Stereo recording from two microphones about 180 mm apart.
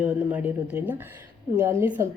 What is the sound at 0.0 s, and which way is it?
A woman's voice, 10° right (ahead or behind).